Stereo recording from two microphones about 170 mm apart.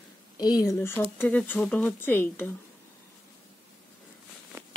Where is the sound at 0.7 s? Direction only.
15° left (ahead or behind).